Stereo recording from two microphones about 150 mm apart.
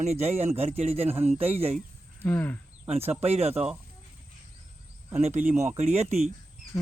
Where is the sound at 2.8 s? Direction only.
45° right (ahead or behind).